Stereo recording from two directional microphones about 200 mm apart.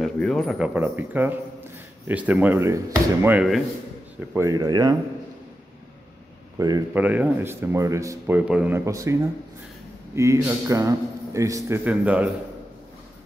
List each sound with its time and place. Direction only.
0.0 s speech: centre (ahead or behind)
4.3 s speech: 15° right (ahead or behind)
6.9 s speech: 10° right (ahead or behind)
10.1 s speech: 15° right (ahead or behind)